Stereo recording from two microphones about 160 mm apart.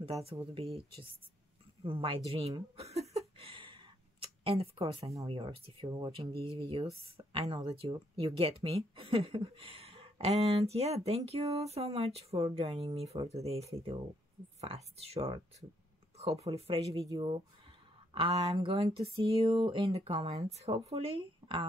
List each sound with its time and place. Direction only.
0.0 s speech: 35° right (ahead or behind)
1.8 s a sound: 35° right (ahead or behind)
5.2 s speech: 35° right (ahead or behind)
7.9 s speech: 25° right (ahead or behind)
8.4 s speech: 35° right (ahead or behind)
18.5 s speech: 35° right (ahead or behind)